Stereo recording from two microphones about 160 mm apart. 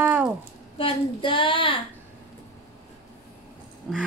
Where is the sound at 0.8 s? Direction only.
30° left (ahead or behind).